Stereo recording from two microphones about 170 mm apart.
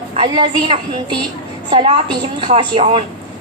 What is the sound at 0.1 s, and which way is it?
Speech, 30° right (ahead or behind).